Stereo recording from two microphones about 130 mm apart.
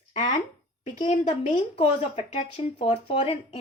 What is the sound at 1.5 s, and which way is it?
Speech, 55° left (ahead or behind).